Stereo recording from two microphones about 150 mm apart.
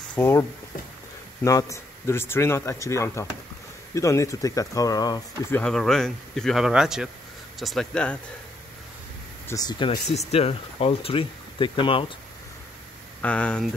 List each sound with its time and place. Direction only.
0.1 s speech: 15° left (ahead or behind)
5.5 s speech: 5° left (ahead or behind)
9.5 s speech: 25° left (ahead or behind)
10.1 s speech: 45° left (ahead or behind)
13.2 s speech: 10° left (ahead or behind)